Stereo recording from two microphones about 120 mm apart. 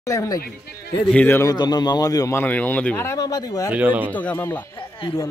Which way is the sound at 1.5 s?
35° left (ahead or behind).